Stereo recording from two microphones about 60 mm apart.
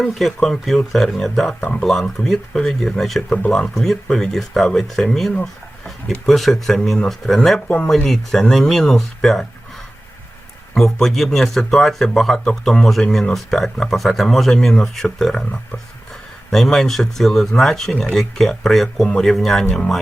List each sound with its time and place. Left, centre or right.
0.0 s speech: centre
6.2 s speech: centre
10.9 s speech: centre